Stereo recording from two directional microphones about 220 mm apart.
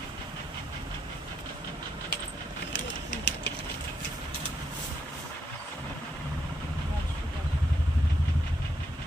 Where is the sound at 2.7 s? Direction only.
55° left (ahead or behind).